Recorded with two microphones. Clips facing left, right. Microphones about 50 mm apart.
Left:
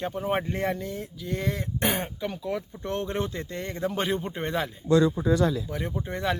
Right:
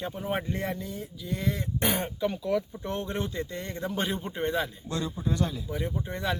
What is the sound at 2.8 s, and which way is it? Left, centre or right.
Speech, left.